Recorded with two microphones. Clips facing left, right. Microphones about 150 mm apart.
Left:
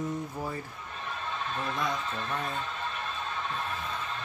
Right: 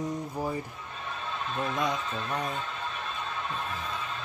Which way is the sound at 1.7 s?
20° right (ahead or behind).